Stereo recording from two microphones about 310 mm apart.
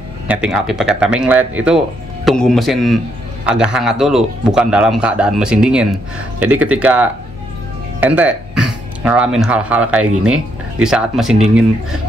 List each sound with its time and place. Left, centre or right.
0.3 s a man's voice: centre